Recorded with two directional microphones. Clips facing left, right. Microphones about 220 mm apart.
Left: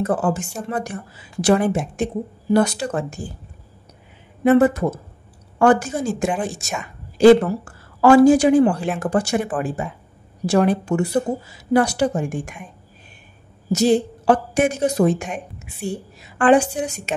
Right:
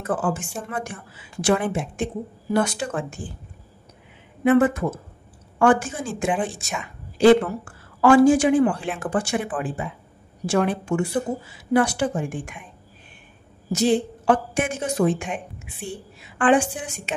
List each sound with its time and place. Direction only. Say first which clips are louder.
0.0 s a woman's voice: left 4 dB; 40° left (ahead or behind)
4.5 s a woman's voice: left 3 dB; 35° left (ahead or behind)
13.7 s a woman's voice: left 3 dB; 40° left (ahead or behind)